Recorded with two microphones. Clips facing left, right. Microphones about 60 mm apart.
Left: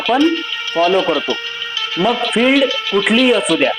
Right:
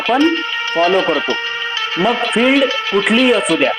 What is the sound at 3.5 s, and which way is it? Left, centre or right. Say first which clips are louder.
Speech: even; right.